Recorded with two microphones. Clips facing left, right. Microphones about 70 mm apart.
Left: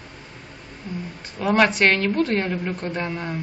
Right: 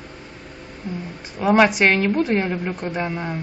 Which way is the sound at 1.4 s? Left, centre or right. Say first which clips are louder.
Right 3 dB; centre.